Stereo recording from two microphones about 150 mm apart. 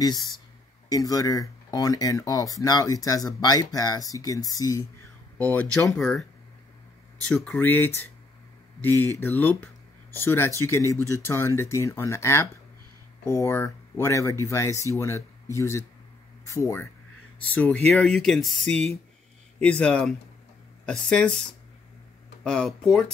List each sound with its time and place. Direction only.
0.8 s speech: 25° left (ahead or behind)
5.4 s speech: 10° left (ahead or behind)
7.2 s speech: 5° left (ahead or behind)